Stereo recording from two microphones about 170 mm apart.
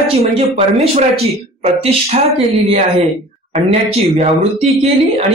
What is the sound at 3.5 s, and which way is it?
A man's voice, 40° right (ahead or behind).